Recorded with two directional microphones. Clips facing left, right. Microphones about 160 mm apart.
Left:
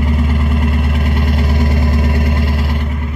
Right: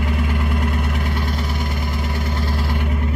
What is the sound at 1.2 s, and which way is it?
Vehicle, 65° left (ahead or behind).